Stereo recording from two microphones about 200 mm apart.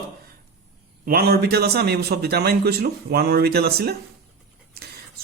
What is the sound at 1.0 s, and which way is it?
Speech, 50° right (ahead or behind).